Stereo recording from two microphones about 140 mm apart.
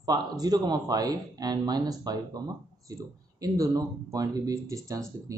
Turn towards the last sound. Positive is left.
turn(degrees=-25)  # may be behind; listen again after turning